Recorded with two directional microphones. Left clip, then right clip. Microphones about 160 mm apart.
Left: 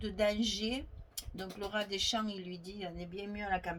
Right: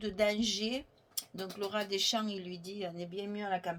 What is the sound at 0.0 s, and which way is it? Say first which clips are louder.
Speech: right 1 dB; 40° right (ahead or behind).